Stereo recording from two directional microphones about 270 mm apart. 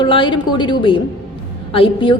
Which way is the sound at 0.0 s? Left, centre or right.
Centre.